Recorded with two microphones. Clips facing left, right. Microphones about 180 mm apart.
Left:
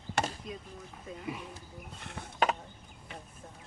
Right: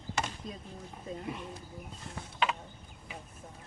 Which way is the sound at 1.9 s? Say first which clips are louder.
Left 3 dB; 70° left (ahead or behind).